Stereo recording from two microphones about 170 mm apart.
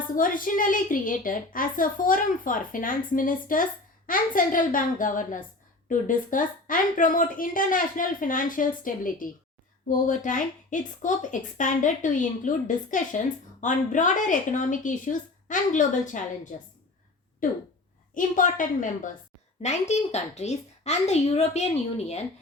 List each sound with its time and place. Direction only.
0.2 s a woman's voice: 55° left (ahead or behind)